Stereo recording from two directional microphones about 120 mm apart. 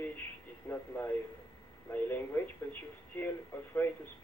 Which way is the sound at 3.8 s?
20° left (ahead or behind).